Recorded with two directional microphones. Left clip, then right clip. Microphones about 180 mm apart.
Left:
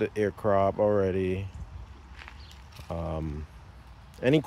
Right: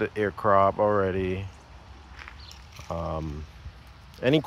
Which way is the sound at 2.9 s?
15° left (ahead or behind).